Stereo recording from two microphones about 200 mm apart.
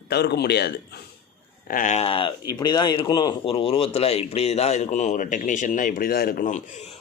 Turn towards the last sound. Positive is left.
turn(degrees=35)  # may be behind; listen again after turning